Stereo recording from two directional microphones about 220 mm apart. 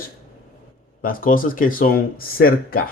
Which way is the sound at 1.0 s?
40° left (ahead or behind).